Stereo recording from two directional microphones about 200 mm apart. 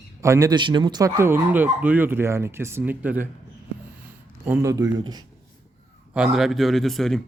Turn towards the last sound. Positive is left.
turn(degrees=0)  # may be behind; listen again after turning